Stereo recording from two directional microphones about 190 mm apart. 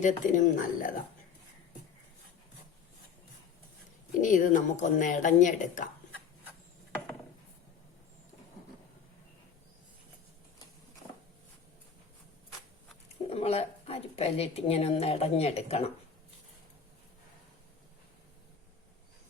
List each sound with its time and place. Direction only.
0.0 s speech: 45° left (ahead or behind)
4.2 s speech: 40° left (ahead or behind)
13.3 s speech: 30° left (ahead or behind)